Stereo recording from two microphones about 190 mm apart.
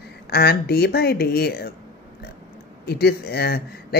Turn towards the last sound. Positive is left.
turn(degrees=55)  # may be behind; listen again after turning